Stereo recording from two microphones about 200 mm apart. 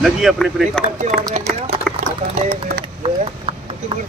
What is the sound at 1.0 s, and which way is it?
Speech, 35° right (ahead or behind).